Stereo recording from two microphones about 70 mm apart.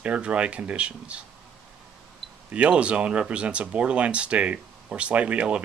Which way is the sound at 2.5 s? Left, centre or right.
Centre.